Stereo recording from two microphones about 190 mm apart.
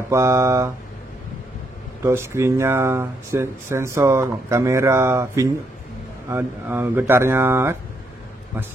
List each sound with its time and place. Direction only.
0.1 s speech: 15° right (ahead or behind)
2.0 s speech: 15° right (ahead or behind)